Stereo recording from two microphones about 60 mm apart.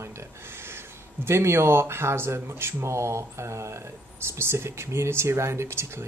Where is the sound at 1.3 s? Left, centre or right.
Right.